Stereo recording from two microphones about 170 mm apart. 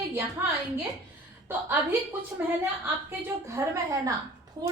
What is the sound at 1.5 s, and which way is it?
A woman's voice, 10° right (ahead or behind).